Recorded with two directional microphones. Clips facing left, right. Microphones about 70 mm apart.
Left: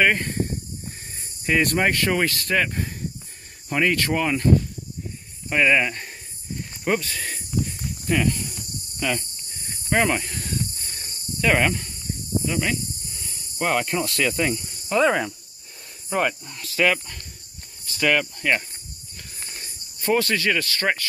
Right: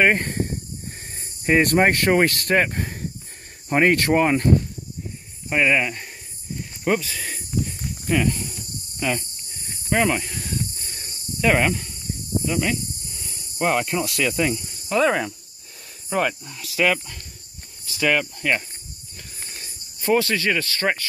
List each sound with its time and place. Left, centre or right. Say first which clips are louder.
0.2 s speech: even; right
1.8 s speech: right 4 dB; right
5.5 s speech: even; centre
6.5 s snake: right 2 dB; centre
12.4 s speech: right 2 dB; centre
19.4 s a sound: left 1 dB; centre
20.2 s speech: right 1 dB; centre